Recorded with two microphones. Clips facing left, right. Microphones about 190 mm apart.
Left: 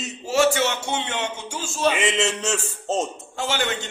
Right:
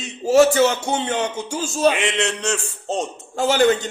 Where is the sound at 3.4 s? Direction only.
40° right (ahead or behind).